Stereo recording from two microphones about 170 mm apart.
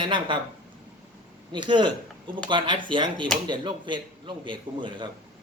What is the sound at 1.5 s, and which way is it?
A man's voice, 25° right (ahead or behind).